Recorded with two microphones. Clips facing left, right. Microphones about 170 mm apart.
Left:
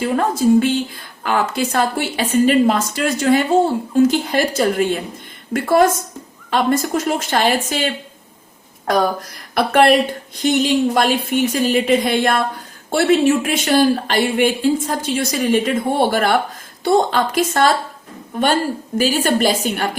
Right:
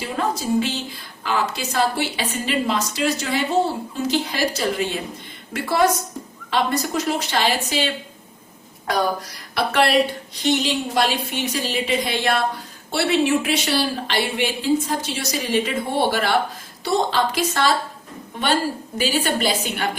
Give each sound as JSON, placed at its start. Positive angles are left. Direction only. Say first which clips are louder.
{"t": 0.0, "sound": "a woman's voice", "louder": "left 8 dB", "side_deg": 50}
{"t": 9.6, "sound": "a woman's voice", "louder": "left 5 dB", "side_deg": 50}